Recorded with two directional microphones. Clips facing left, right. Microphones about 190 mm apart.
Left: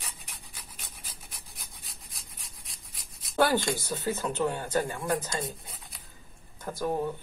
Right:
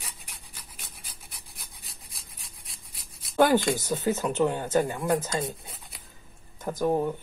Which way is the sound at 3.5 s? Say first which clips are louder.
Right 5 dB; 15° right (ahead or behind).